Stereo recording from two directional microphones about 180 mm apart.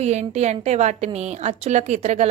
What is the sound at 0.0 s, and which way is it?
A woman's voice, 40° right (ahead or behind).